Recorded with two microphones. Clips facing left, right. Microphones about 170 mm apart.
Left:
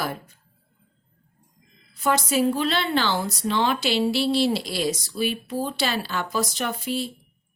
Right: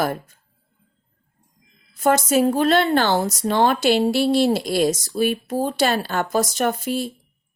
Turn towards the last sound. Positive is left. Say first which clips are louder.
# right 5 dB
turn(degrees=-45)  # may be behind; listen again after turning